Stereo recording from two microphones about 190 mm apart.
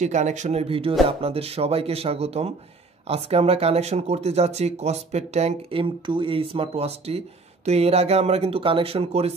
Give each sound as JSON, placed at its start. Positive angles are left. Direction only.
{"t": 0.0, "sound": "speech", "side_deg": -40}